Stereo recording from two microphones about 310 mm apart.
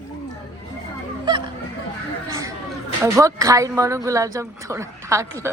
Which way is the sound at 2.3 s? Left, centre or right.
Centre.